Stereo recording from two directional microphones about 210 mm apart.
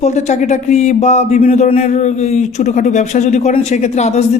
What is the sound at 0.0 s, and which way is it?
Speech, 35° left (ahead or behind).